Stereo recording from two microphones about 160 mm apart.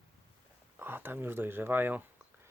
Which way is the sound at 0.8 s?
15° right (ahead or behind).